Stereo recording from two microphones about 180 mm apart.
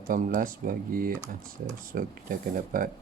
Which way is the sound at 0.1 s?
50° right (ahead or behind).